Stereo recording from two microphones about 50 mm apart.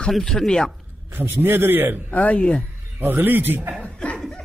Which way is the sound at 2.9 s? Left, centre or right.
Right.